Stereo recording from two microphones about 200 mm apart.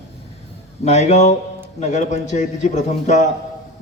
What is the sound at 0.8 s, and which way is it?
A man's voice, 35° left (ahead or behind).